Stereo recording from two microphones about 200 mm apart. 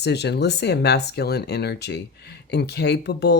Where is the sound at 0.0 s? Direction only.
55° left (ahead or behind).